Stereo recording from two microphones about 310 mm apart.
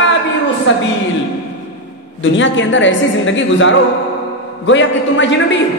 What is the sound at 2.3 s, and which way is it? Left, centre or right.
Speech, left.